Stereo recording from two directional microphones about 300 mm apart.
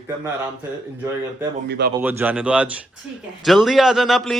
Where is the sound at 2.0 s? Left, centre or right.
Centre.